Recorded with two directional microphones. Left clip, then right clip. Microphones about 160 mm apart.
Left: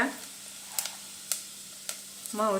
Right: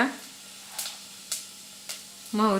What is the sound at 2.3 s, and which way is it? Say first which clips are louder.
Speech: right 4 dB; 90° right.